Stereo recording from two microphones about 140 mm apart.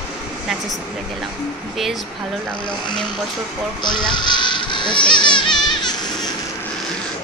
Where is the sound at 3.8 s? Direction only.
35° left (ahead or behind).